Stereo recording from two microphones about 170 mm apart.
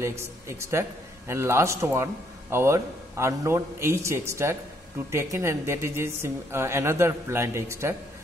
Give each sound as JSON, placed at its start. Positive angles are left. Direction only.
{"t": 0.0, "sound": "speech", "side_deg": -15}